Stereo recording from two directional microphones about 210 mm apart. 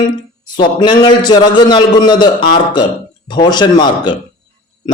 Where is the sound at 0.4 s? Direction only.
20° left (ahead or behind).